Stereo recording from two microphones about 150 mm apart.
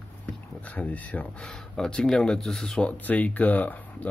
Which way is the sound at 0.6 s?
10° left (ahead or behind).